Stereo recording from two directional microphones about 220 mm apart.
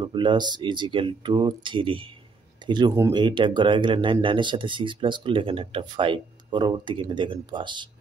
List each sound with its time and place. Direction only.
0.0 s speech: 20° right (ahead or behind)